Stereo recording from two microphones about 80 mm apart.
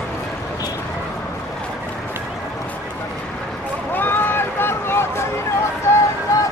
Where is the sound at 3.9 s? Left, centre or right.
Left.